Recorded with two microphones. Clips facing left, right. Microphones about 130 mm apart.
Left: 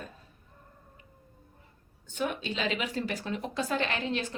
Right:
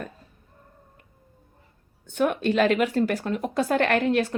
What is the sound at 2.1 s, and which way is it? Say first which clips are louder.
Speech: right 11 dB; 55° right (ahead or behind).